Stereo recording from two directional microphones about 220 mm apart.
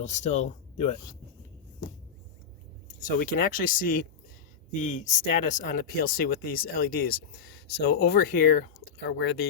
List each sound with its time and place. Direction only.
0.0 s speech: 30° left (ahead or behind)
3.1 s speech: 40° left (ahead or behind)
9.0 s speech: 50° left (ahead or behind)